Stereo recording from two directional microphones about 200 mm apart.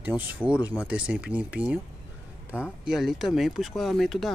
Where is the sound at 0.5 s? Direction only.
15° left (ahead or behind).